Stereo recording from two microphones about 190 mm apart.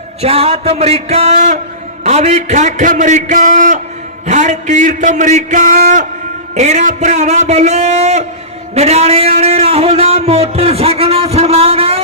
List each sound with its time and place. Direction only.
0.2 s speech: 30° right (ahead or behind)